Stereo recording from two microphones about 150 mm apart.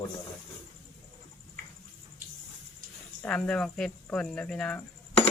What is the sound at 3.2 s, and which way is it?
Speech, 5° left (ahead or behind).